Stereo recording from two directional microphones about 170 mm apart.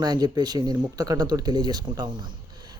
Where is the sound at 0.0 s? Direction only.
25° right (ahead or behind).